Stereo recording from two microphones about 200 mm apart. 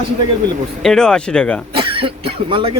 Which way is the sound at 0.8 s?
5° left (ahead or behind).